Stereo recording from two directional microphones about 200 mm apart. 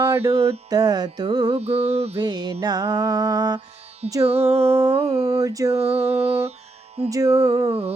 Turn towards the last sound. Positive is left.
turn(degrees=-15)  # may be behind; listen again after turning